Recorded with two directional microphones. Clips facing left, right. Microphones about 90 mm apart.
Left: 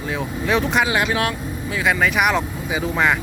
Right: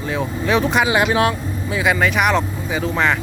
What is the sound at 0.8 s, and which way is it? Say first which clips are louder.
Speech: right 4 dB; 20° right (ahead or behind).